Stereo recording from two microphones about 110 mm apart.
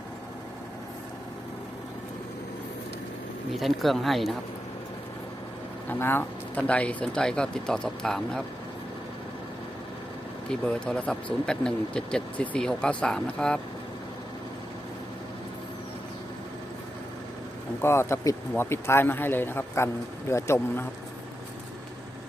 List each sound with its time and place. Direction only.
3.5 s speech: centre (ahead or behind)
5.9 s speech: 20° left (ahead or behind); by 8.4 s 5° left (ahead or behind)
10.5 s speech: 10° left (ahead or behind)
17.8 s speech: 25° left (ahead or behind)